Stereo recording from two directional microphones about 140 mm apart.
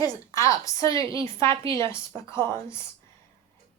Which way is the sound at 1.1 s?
40° right (ahead or behind).